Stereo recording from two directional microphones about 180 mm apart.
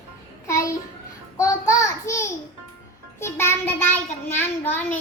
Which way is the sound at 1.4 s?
15° left (ahead or behind).